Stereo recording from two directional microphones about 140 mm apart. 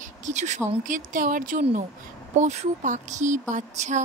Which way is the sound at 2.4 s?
55° right (ahead or behind).